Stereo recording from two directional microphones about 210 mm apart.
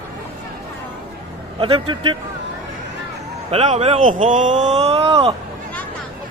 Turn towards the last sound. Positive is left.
turn(degrees=-30)  # may be behind; listen again after turning